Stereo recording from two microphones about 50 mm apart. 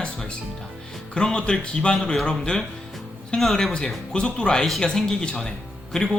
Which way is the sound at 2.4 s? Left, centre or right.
Centre.